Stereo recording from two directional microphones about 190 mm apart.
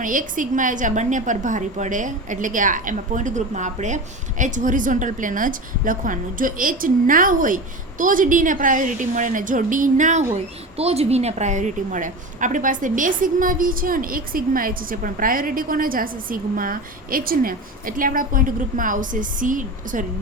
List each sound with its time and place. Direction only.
0.0 s a woman's voice: 45° right (ahead or behind)